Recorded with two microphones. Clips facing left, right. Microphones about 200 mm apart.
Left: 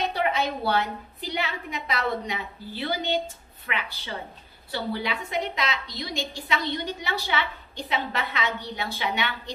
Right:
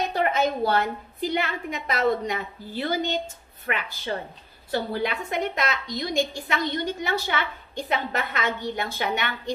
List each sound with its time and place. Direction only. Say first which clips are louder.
0.1 s a woman's voice: right 3 dB; 45° right (ahead or behind)